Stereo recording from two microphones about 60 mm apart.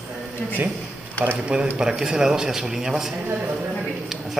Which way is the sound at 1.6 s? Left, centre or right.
Centre.